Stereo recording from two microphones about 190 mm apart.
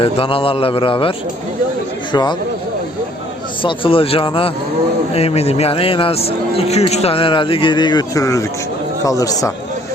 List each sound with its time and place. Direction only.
0.0 s speech: 30° left (ahead or behind)
3.6 s speech: 25° left (ahead or behind)